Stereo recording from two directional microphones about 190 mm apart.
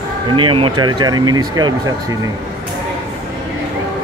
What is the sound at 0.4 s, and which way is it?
Speech, 25° right (ahead or behind).